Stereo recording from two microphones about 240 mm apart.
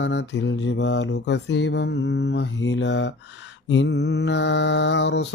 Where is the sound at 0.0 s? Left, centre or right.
Left.